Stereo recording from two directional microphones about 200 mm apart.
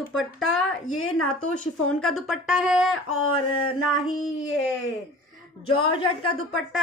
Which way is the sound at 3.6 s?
90° left.